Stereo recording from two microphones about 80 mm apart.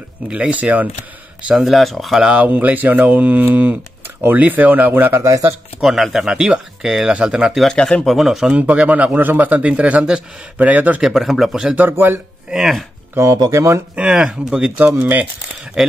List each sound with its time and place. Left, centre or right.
0.3 s speech: centre
1.6 s speech: centre
2.2 s speech: centre
5.1 s speech: right
5.8 s speech: centre
7.6 s speech: centre
8.5 s speech: centre
11.0 s speech: centre
11.7 s speech: right
12.4 s speech: centre
13.5 s speech: right
13.9 s speech: centre
15.0 s speech: right
15.8 s speech: centre